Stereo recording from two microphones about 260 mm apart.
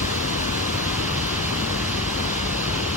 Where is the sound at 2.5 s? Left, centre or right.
Left.